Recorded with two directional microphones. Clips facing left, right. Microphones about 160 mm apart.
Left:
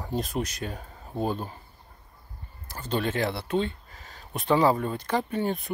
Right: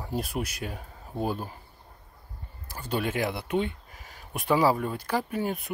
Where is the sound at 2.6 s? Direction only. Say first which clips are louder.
Left 1 dB; 10° right (ahead or behind).